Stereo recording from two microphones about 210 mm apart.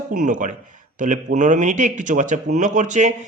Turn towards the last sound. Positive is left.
turn(degrees=-35)  # may be behind; listen again after turning